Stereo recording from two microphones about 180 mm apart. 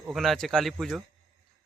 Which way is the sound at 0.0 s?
Centre (ahead or behind).